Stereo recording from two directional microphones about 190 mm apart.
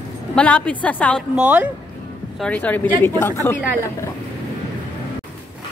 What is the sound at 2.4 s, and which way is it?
A woman's voice, 5° left (ahead or behind).